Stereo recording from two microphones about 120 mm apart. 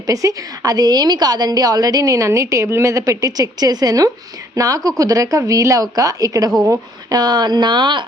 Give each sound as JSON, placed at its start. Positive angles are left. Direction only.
{"t": 0.1, "sound": "a woman's voice", "side_deg": -30}